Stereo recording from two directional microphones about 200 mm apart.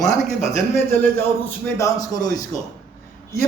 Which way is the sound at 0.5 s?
10° left (ahead or behind).